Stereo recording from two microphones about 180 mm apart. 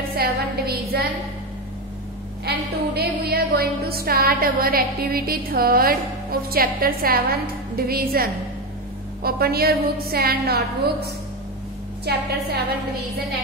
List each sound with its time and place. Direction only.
0.2 s a sound: 55° right (ahead or behind)
2.4 s a woman's voice: 60° right (ahead or behind)
12.0 s a woman's voice: 65° right (ahead or behind)